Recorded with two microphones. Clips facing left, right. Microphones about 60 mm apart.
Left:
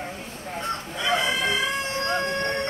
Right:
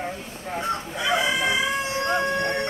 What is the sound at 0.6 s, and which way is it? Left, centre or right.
Crowing, centre.